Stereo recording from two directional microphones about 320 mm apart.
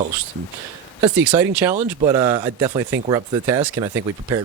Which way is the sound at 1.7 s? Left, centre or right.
Right.